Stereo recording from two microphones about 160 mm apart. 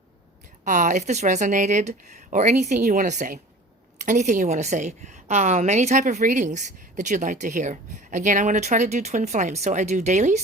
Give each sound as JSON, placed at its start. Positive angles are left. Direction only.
{"t": 0.6, "sound": "a woman's voice", "side_deg": -50}